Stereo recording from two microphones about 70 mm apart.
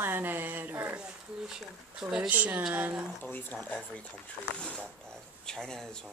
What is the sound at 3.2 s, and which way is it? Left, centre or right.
Speech, left.